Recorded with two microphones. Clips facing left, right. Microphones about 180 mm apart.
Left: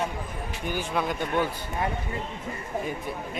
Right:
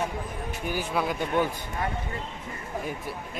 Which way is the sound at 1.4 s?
15° right (ahead or behind).